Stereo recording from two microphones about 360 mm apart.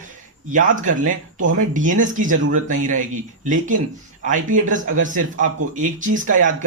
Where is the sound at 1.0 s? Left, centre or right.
Right.